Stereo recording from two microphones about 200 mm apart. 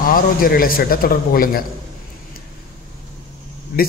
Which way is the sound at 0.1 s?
45° left (ahead or behind).